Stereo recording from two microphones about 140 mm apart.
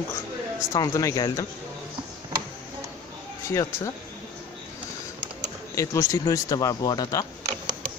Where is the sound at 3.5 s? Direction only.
20° left (ahead or behind).